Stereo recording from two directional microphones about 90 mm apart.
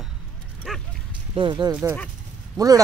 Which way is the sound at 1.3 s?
60° right (ahead or behind).